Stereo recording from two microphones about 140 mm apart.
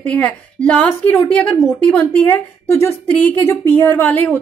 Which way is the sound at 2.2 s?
15° left (ahead or behind).